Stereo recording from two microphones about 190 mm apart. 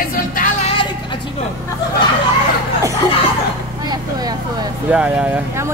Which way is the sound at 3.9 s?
20° right (ahead or behind).